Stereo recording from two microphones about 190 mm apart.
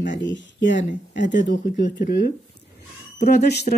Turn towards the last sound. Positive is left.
turn(degrees=55)  # may be behind; listen again after turning